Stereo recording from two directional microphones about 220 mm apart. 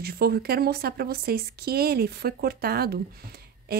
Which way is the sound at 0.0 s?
45° right (ahead or behind).